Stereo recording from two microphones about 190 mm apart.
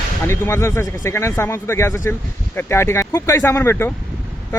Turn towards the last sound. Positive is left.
turn(degrees=15)  # may be behind; listen again after turning